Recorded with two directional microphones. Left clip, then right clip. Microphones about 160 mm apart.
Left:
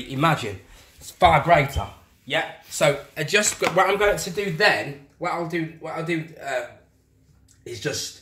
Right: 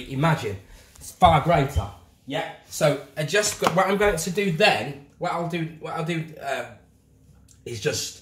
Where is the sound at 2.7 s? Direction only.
40° left (ahead or behind).